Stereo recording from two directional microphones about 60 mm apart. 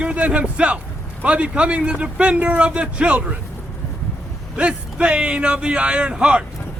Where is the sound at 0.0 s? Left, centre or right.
Right.